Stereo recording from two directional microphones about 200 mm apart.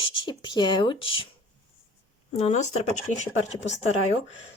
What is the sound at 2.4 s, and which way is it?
Speech, 35° left (ahead or behind).